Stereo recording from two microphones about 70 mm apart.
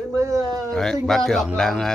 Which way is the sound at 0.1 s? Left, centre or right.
Right.